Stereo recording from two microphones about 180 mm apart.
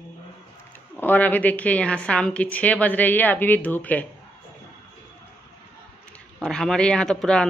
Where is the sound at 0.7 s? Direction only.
10° left (ahead or behind).